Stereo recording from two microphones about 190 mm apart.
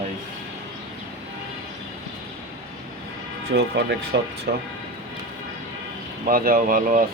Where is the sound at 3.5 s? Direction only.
65° right (ahead or behind).